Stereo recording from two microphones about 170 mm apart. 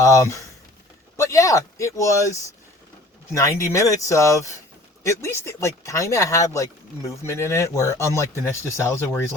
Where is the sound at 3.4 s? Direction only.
15° left (ahead or behind).